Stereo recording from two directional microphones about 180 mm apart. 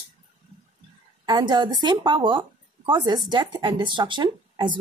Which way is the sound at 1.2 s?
25° right (ahead or behind).